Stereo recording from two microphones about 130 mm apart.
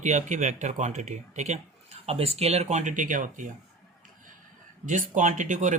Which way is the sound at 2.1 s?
50° right (ahead or behind).